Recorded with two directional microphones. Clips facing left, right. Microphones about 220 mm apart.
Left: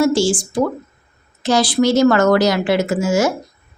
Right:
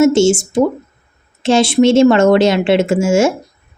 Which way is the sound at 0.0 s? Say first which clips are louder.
Right 5 dB; 25° right (ahead or behind).